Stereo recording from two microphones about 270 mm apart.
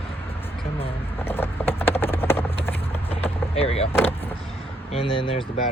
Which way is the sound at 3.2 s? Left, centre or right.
Left.